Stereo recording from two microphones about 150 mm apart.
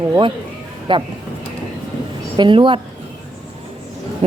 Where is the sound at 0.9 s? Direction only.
35° right (ahead or behind).